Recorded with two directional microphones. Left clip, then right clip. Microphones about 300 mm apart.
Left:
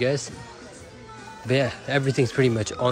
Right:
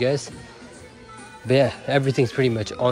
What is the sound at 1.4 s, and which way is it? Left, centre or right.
Speech, centre.